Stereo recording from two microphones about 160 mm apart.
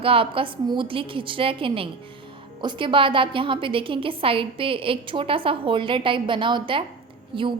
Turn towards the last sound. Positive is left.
turn(degrees=-30)  # may be behind; listen again after turning